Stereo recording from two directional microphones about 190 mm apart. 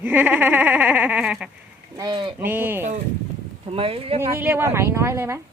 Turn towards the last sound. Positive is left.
turn(degrees=-15)  # may be behind; listen again after turning